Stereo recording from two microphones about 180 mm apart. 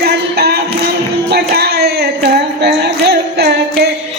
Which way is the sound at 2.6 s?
65° right (ahead or behind).